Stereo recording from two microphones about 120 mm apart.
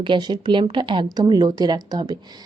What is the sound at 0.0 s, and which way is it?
Speech, 40° right (ahead or behind).